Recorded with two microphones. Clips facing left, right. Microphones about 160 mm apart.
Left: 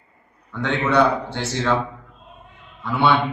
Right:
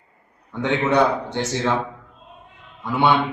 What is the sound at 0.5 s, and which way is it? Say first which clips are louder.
A man's voice: even; 15° right (ahead or behind).